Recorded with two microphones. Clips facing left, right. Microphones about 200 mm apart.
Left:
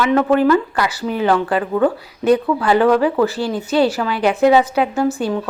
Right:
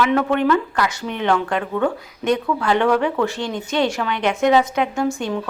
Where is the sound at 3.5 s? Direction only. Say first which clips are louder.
Left 5 dB; 35° left (ahead or behind).